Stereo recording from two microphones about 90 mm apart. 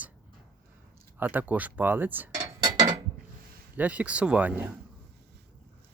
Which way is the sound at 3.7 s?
15° right (ahead or behind).